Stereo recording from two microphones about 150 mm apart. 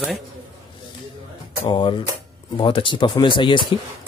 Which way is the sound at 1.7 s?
30° left (ahead or behind).